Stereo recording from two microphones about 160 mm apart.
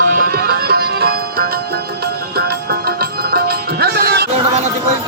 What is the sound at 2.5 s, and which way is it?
Music, 75° right (ahead or behind).